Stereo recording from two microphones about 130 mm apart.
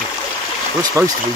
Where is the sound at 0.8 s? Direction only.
25° right (ahead or behind).